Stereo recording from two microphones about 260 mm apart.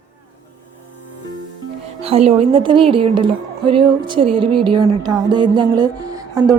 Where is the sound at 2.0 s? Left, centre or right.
Right.